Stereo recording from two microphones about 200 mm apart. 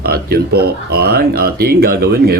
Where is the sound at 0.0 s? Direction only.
50° right (ahead or behind).